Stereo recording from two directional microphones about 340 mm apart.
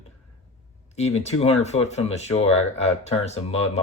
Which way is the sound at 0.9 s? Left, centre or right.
Centre.